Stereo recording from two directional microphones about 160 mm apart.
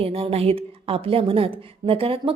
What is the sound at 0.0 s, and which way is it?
A woman's voice, 40° right (ahead or behind).